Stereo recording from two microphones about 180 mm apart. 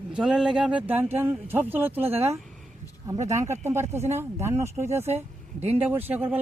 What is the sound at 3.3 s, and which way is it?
Speech, 15° right (ahead or behind).